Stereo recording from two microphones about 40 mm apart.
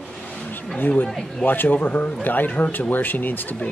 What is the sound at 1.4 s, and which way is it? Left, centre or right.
Speech, left.